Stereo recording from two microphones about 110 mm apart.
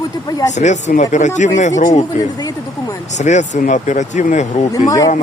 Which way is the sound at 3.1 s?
90° left.